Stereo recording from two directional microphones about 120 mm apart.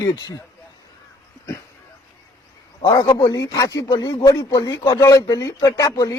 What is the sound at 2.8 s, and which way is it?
Speech, 30° left (ahead or behind).